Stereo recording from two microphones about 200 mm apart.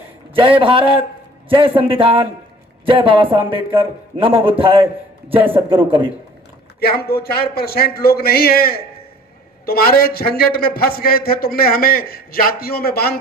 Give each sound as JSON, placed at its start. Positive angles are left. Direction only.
{"t": 0.3, "sound": "a man's voice", "side_deg": -25}
{"t": 6.7, "sound": "a man's voice", "side_deg": 50}